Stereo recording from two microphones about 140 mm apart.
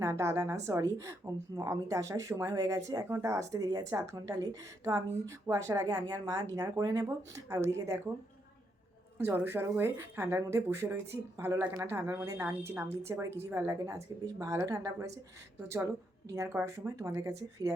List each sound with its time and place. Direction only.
0.0 s a woman's voice: 20° right (ahead or behind)
9.1 s a woman's voice: 15° right (ahead or behind)
16.3 s a woman's voice: 20° right (ahead or behind)